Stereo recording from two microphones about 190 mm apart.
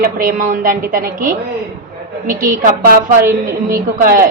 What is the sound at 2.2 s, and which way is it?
A woman's voice, 45° right (ahead or behind).